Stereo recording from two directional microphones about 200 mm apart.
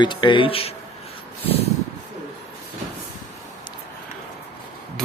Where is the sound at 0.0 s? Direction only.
25° left (ahead or behind).